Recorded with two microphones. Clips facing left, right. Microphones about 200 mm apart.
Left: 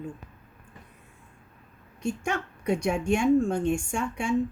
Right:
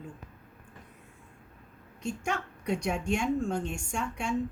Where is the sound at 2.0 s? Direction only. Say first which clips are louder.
Left 4 dB; 50° left (ahead or behind).